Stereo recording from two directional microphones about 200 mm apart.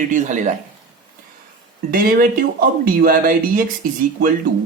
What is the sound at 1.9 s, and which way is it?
Speech, 45° right (ahead or behind).